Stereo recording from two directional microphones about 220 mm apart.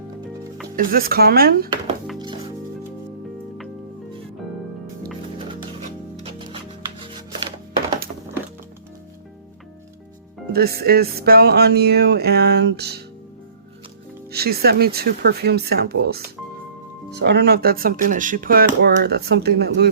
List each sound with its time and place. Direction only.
0.8 s speech: 40° right (ahead or behind)
2.1 s music: 20° right (ahead or behind)
10.5 s speech: 45° right (ahead or behind)
14.3 s speech: 45° right (ahead or behind)